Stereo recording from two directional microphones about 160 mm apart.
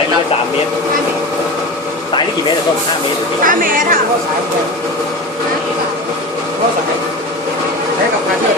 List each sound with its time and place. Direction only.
3.4 s speech: 60° right (ahead or behind)